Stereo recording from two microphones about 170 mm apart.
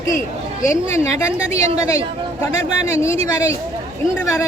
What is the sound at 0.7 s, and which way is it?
A woman's voice, 15° left (ahead or behind).